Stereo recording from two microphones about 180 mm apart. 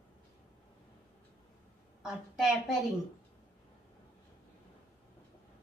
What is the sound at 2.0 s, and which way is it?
Speech, centre (ahead or behind).